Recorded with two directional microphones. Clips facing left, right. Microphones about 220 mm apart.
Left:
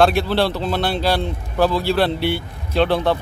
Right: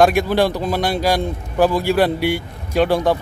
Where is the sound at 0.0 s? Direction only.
15° right (ahead or behind).